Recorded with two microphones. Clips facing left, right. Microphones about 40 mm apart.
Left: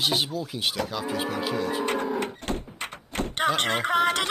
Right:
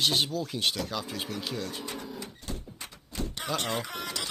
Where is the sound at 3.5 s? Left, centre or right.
Left.